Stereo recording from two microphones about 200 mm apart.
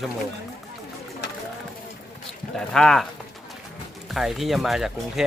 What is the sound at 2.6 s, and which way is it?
Speech, centre (ahead or behind).